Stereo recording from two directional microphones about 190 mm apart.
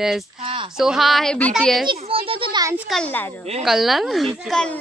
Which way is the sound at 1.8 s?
30° right (ahead or behind).